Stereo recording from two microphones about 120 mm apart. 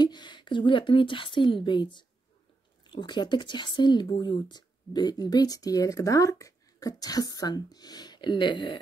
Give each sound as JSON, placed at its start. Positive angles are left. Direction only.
{"t": 0.0, "sound": "speech", "side_deg": 40}